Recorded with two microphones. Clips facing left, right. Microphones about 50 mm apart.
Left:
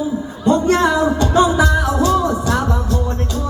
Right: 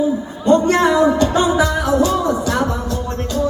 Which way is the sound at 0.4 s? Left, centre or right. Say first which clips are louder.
Right 1 dB; right.